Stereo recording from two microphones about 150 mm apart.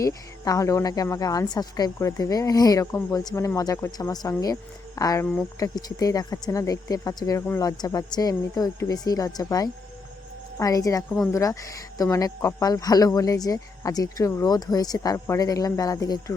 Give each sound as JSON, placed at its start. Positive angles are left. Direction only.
{"t": 0.0, "sound": "a woman's voice", "side_deg": 20}